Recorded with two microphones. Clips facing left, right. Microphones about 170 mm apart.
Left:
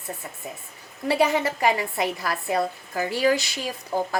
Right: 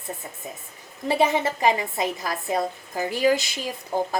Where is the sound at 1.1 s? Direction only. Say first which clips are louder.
Even; 20° right (ahead or behind).